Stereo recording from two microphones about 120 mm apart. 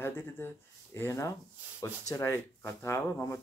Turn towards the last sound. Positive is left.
turn(degrees=25)  # may be behind; listen again after turning